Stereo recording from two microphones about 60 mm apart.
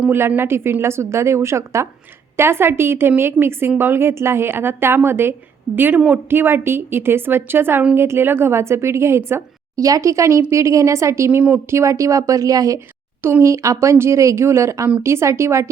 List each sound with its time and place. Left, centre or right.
0.1 s a woman's voice: right
9.7 s a woman's voice: right
11.3 s a woman's voice: right
11.7 s speech: right
13.4 s a woman's voice: right